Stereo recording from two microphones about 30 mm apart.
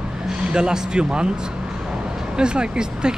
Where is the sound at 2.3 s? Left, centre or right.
Right.